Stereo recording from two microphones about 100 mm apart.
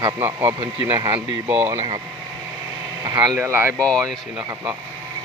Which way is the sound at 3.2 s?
30° right (ahead or behind).